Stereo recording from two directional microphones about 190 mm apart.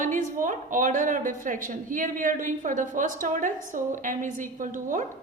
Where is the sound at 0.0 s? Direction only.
45° right (ahead or behind).